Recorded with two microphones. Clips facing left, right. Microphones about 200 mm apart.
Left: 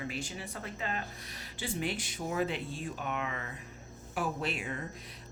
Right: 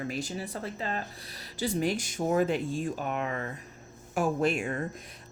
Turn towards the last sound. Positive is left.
turn(degrees=-45)  # may be behind; listen again after turning